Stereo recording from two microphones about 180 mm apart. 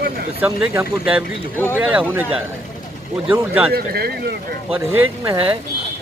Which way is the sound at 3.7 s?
60° right (ahead or behind).